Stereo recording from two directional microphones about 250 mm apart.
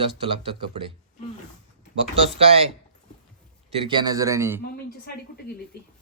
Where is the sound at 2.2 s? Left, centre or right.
Right.